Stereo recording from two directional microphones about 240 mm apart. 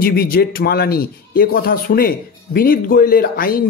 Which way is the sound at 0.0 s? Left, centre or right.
Left.